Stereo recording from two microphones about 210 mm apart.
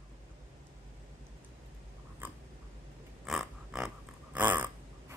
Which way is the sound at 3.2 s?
Centre (ahead or behind).